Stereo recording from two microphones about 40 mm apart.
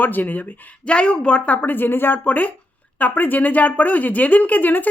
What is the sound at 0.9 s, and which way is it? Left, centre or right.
Speech, left.